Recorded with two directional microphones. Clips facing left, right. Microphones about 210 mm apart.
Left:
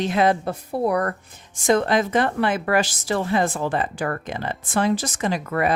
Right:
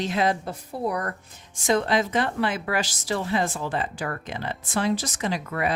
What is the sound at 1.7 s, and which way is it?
A woman's voice, 50° left (ahead or behind).